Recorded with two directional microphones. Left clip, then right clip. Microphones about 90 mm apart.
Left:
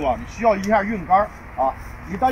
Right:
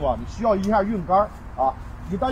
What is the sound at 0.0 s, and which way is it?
Speech, 35° right (ahead or behind).